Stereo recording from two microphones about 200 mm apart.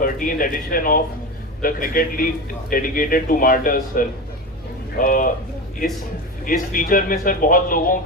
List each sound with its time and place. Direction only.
0.0 s speech: 45° left (ahead or behind)
6.4 s speech: 45° left (ahead or behind)